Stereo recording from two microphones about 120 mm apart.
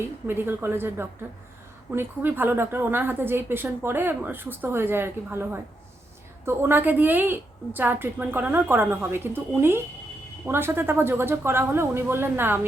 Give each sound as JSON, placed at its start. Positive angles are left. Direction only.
{"t": 0.0, "sound": "a woman's voice", "side_deg": -20}